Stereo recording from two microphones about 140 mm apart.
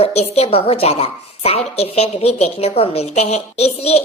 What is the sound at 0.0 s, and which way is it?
A woman's voice, 50° left (ahead or behind).